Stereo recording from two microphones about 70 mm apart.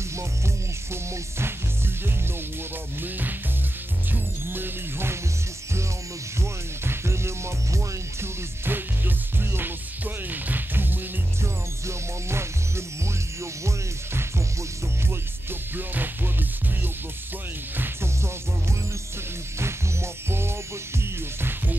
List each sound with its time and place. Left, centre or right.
3.0 s music: right
6.4 s music: right
12.3 s music: right
15.7 s music: right
17.7 s music: right